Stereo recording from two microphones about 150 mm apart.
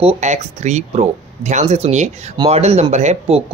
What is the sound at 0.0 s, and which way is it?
Speech, 50° right (ahead or behind).